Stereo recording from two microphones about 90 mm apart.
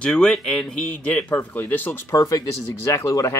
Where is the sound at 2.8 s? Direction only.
35° left (ahead or behind).